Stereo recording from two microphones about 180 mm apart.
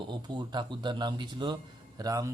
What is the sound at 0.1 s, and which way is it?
A man's voice, 25° right (ahead or behind).